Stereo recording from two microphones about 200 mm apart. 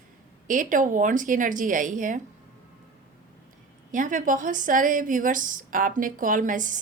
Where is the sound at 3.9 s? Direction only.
40° right (ahead or behind).